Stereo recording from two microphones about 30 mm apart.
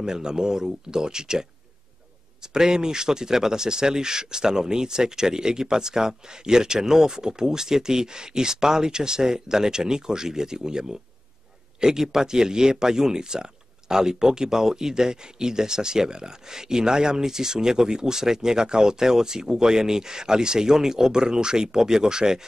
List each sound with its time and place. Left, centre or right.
0.0 s speech: right